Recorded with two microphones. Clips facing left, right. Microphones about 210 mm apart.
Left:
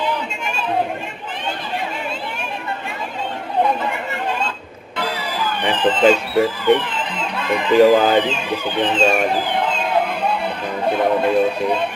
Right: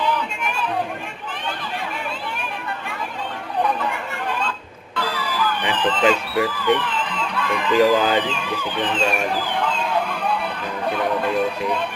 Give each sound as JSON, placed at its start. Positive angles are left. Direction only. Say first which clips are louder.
{"t": 3.6, "sound": "chatter", "louder": "left 3 dB", "side_deg": 25}
{"t": 4.9, "sound": "speech", "louder": "left 1 dB", "side_deg": 25}
{"t": 10.8, "sound": "music", "louder": "left 5 dB", "side_deg": 25}